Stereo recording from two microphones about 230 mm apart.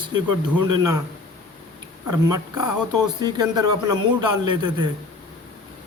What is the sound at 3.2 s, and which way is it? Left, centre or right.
Speech, centre.